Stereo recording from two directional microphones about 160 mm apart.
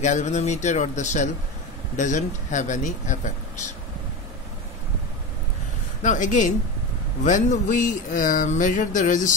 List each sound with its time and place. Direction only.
0.0 s speech: 50° left (ahead or behind)
6.0 s speech: 50° left (ahead or behind)